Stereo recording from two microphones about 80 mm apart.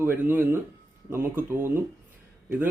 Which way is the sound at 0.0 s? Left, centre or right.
Right.